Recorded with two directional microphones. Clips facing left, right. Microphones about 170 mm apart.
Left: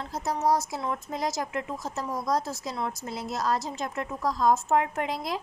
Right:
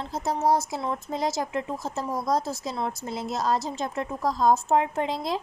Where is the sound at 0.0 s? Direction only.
25° right (ahead or behind).